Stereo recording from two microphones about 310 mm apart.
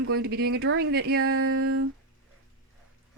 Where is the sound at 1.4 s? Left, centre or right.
Right.